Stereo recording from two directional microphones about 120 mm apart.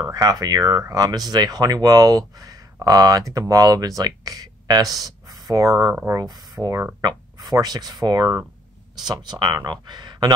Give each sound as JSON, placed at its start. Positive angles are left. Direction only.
{"t": 0.1, "sound": "speech", "side_deg": -30}